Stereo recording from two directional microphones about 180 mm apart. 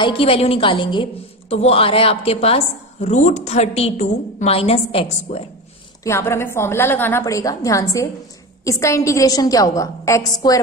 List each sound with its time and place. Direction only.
0.0 s a woman's voice: 30° left (ahead or behind)
6.0 s a woman's voice: 15° left (ahead or behind)